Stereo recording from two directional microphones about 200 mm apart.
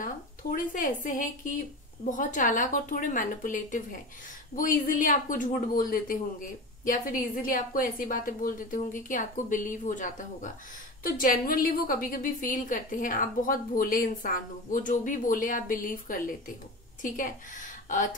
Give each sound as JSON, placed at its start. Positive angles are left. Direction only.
{"t": 0.0, "sound": "a woman's voice", "side_deg": 45}